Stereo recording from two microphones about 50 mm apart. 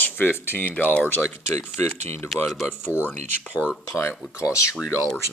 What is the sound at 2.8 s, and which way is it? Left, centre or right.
Speech, left.